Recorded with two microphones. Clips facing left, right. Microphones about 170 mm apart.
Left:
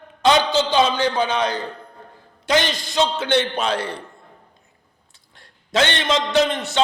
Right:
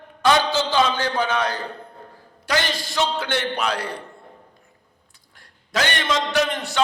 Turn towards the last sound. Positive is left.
turn(degrees=20)  # may be behind; listen again after turning